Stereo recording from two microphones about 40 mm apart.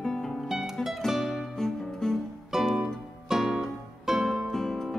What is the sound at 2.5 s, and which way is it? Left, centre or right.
Music, centre.